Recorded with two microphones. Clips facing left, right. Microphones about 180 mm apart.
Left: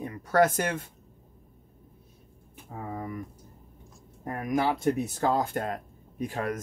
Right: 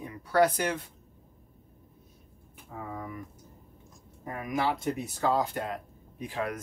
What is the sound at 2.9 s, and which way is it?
Speech, 40° left (ahead or behind).